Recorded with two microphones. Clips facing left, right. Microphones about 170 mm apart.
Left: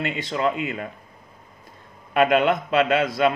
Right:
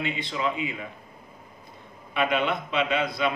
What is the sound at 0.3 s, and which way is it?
Speech, 45° left (ahead or behind).